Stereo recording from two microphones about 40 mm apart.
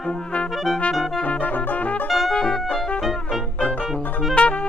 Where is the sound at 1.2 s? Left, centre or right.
Left.